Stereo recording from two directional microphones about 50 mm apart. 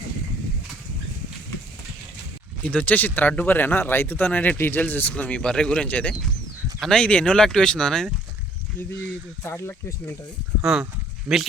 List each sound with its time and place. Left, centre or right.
2.6 s speech: left; by 8.1 s centre
9.4 s speech: left
10.6 s speech: centre